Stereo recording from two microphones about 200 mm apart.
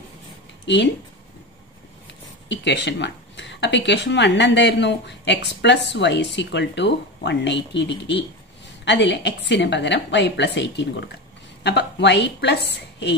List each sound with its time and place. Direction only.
2.4 s speech: 60° left (ahead or behind)